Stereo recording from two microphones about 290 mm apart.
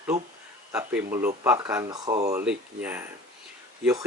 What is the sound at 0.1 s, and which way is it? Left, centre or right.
Speech, right.